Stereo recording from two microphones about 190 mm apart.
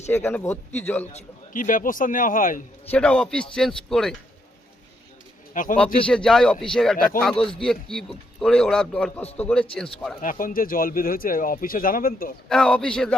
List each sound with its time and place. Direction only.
0.1 s speech: 10° left (ahead or behind)
1.1 s speech: 45° left (ahead or behind)
2.9 s a man's voice: 5° left (ahead or behind)
5.5 s speech: 45° left (ahead or behind)
6.1 s a man's voice: 5° left (ahead or behind)
10.2 s speech: 45° left (ahead or behind)
12.5 s a man's voice: 5° left (ahead or behind)